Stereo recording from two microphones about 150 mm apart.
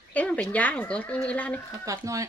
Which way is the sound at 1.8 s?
20° right (ahead or behind).